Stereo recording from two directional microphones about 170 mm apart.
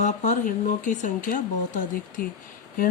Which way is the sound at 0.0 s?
45° left (ahead or behind).